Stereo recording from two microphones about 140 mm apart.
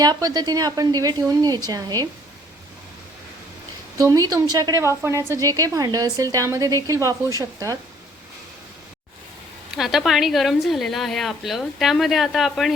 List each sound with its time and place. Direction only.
0.0 s a woman's voice: 30° right (ahead or behind)
3.9 s a woman's voice: 25° right (ahead or behind)
9.7 s a woman's voice: centre (ahead or behind)